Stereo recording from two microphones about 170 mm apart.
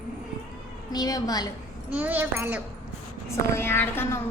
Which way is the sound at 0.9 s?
20° left (ahead or behind).